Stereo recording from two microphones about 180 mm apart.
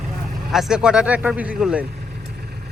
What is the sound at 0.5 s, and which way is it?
Speech, 5° right (ahead or behind).